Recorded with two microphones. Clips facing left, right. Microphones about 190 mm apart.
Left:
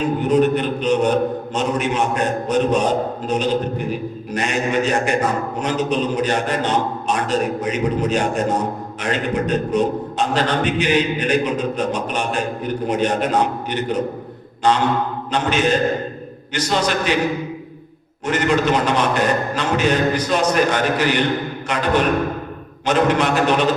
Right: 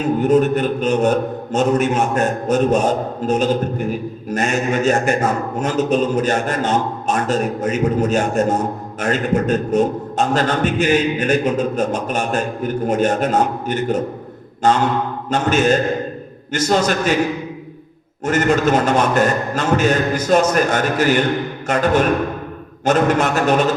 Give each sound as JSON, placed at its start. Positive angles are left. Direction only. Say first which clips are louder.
{"t": 0.2, "sound": "a man's voice", "louder": "right 2 dB", "side_deg": -45}
{"t": 18.3, "sound": "a man's voice", "louder": "right 2 dB", "side_deg": -45}